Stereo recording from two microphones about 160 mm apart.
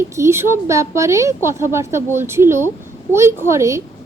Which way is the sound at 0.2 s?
15° right (ahead or behind).